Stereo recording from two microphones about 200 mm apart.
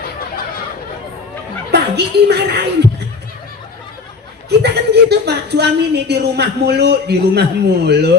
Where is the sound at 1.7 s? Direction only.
55° right (ahead or behind).